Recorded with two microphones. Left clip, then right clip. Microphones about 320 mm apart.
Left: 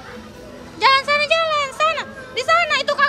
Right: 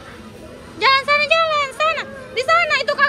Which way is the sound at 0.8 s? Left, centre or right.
Centre.